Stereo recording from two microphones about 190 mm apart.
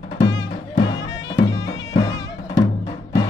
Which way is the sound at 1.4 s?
70° left (ahead or behind).